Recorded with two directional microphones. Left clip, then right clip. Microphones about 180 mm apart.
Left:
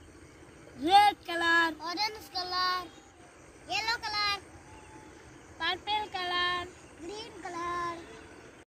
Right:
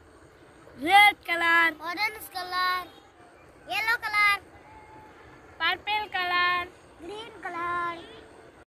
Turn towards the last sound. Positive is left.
turn(degrees=15)  # may be behind; listen again after turning